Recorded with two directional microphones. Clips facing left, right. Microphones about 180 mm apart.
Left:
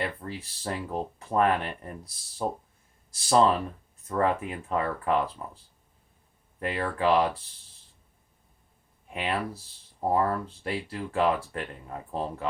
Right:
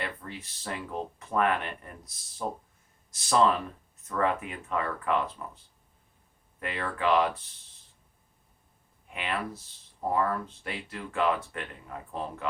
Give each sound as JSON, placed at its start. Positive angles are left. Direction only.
{"t": 0.0, "sound": "speech", "side_deg": 30}
{"t": 6.6, "sound": "speech", "side_deg": 35}
{"t": 9.1, "sound": "speech", "side_deg": 30}